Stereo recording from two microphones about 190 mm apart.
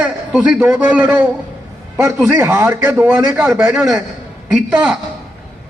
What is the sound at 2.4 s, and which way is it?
A man's voice, 15° right (ahead or behind).